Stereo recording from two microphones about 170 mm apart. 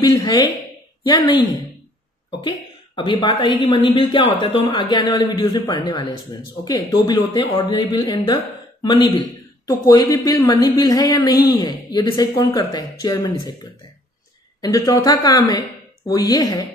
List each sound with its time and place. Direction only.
0.0 s a man's voice: 25° left (ahead or behind)
3.0 s a man's voice: 30° left (ahead or behind)
14.6 s a man's voice: 20° left (ahead or behind)